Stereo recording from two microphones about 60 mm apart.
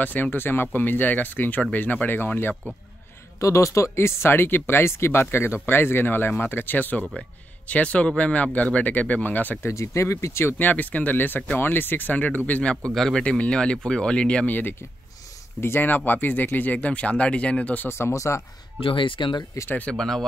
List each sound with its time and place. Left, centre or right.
0.0 s speech: left
3.3 s speech: left
9.6 s speech: left
10.6 s speech: left
12.9 s speech: centre
13.2 s speech: centre
17.8 s speech: left
18.1 s speech: left
19.6 s speech: left
19.9 s speech: centre